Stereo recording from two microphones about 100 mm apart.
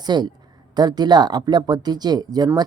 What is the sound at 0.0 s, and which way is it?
A woman's voice, 45° right (ahead or behind).